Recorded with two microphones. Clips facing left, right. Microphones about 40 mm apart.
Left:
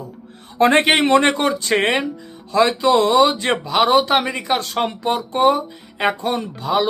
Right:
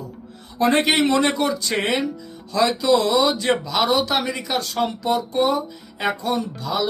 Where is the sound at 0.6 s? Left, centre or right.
Left.